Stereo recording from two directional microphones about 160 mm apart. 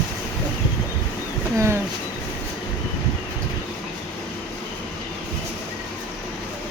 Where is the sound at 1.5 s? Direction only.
15° right (ahead or behind).